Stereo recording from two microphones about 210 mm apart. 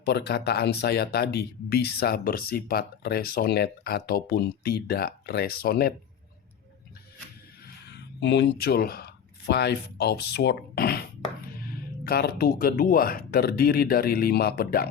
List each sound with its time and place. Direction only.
0.0 s speech: 50° left (ahead or behind)
7.9 s speech: 55° left (ahead or behind)
12.0 s speech: 45° left (ahead or behind)